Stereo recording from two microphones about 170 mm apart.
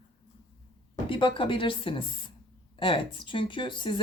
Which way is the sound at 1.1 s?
30° left (ahead or behind).